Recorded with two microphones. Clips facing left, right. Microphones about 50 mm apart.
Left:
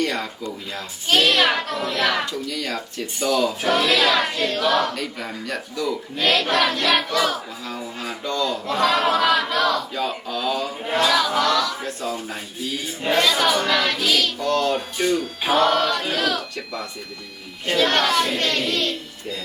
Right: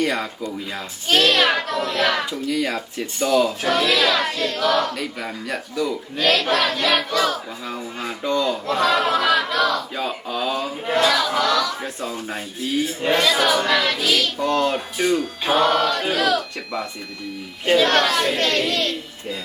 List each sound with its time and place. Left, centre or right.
0.0 s speech: centre
1.0 s speech: centre
2.2 s speech: centre
4.1 s child singing: centre
4.5 s speech: centre
4.9 s speech: centre
8.0 s a sound: centre
8.6 s battle cry: centre
9.9 s a sound: centre
10.8 s a sound: centre
13.0 s speech: centre
14.4 s music: centre
14.9 s speech: centre